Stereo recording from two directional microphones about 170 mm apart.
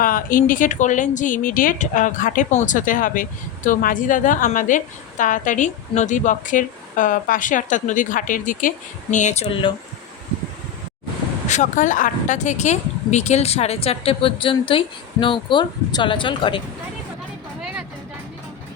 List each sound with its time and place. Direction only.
0.0 s speech: 55° left (ahead or behind); by 9.7 s 30° left (ahead or behind)
11.4 s speech: 45° left (ahead or behind); by 16.6 s 30° left (ahead or behind)